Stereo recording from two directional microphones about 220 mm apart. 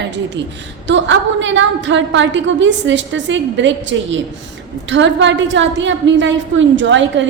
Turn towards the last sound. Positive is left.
turn(degrees=-55)  # may be behind; listen again after turning